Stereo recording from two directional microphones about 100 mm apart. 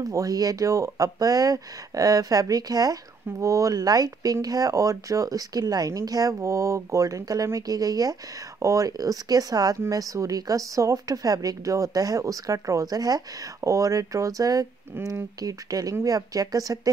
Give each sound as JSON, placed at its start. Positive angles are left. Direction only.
{"t": 0.0, "sound": "speech", "side_deg": -35}
{"t": 15.0, "sound": "speech", "side_deg": -25}
{"t": 15.4, "sound": "speech", "side_deg": -35}